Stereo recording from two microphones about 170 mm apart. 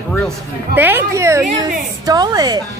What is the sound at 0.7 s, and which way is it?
A woman's voice, 10° right (ahead or behind).